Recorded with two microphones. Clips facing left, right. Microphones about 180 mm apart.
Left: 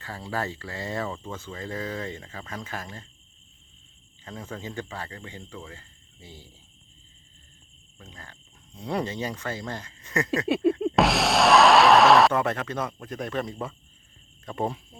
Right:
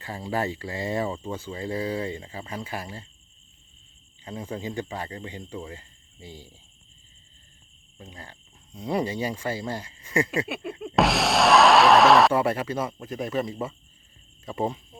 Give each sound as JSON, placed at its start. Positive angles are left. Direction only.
{"t": 0.0, "sound": "speech", "side_deg": -15}
{"t": 4.2, "sound": "speech", "side_deg": -15}
{"t": 7.9, "sound": "speech", "side_deg": -15}
{"t": 10.5, "sound": "music", "side_deg": 30}
{"t": 10.9, "sound": "speech", "side_deg": 0}